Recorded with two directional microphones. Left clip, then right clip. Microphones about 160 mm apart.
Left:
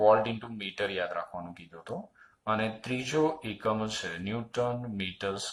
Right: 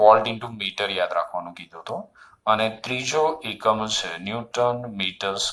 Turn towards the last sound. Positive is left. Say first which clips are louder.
# right 8 dB
turn(degrees=-20)  # may be behind; listen again after turning